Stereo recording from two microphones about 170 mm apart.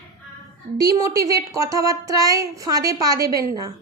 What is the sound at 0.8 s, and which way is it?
A woman's voice, 20° right (ahead or behind).